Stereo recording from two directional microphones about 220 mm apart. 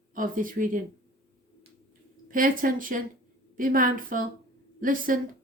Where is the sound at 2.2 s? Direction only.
40° right (ahead or behind).